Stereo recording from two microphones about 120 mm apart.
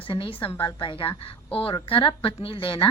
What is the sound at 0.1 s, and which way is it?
A woman's voice, 45° left (ahead or behind).